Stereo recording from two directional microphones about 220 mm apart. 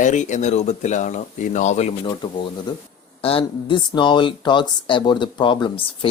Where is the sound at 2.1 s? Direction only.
20° left (ahead or behind).